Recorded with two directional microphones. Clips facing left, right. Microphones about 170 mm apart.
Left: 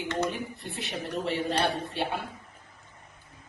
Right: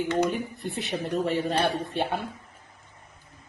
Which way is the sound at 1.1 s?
45° right (ahead or behind).